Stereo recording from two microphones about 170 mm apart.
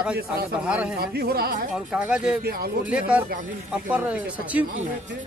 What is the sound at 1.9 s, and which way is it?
Speech, 5° right (ahead or behind).